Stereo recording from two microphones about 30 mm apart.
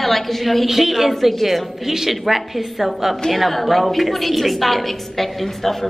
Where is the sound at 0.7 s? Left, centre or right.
Centre.